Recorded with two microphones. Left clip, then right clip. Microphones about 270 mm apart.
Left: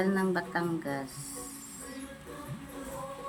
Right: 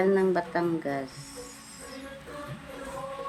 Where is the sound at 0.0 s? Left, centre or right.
Centre.